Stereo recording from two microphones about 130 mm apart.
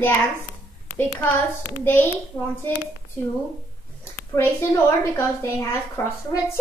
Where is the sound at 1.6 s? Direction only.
15° left (ahead or behind).